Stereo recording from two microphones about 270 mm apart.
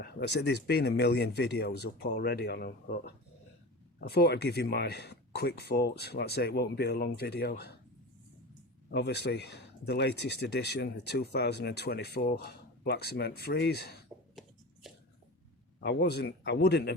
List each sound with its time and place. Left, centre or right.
0.0 s speech: left
4.1 s speech: left
8.9 s speech: left
14.3 s a sound: centre
15.8 s speech: left